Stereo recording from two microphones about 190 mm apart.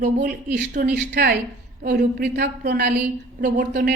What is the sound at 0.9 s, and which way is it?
A woman's voice, 60° right (ahead or behind).